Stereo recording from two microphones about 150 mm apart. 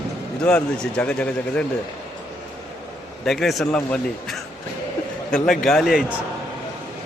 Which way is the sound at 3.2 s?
Centre (ahead or behind).